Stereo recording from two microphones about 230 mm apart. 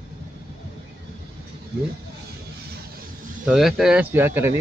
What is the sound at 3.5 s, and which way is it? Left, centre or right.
Speech, centre.